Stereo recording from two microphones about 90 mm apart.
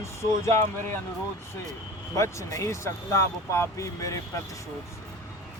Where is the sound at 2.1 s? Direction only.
35° left (ahead or behind).